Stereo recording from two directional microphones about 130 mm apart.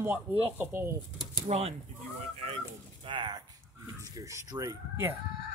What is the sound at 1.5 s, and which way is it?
Speech, 55° right (ahead or behind).